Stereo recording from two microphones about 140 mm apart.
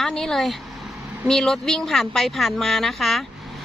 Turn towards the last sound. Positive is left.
turn(degrees=0)  # may be behind; listen again after turning